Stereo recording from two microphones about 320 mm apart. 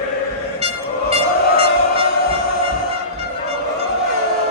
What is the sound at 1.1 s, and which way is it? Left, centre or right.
Music, centre.